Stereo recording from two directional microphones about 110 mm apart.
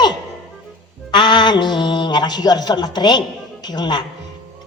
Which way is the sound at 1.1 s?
45° left (ahead or behind).